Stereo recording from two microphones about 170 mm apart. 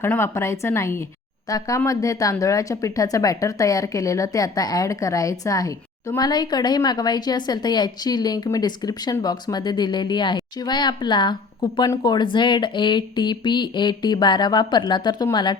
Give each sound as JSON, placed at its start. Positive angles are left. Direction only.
{"t": 0.0, "sound": "speech", "side_deg": 15}